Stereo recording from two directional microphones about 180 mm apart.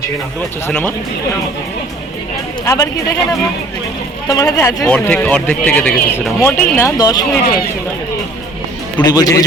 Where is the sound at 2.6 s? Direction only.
20° left (ahead or behind).